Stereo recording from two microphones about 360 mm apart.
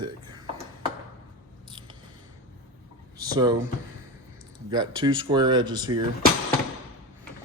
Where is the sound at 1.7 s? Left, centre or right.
Centre.